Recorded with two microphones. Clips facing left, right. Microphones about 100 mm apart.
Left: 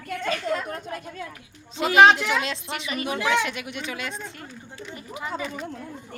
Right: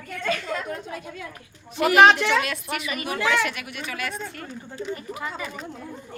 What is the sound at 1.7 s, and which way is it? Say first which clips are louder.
Speech: right 3 dB; 20° left (ahead or behind).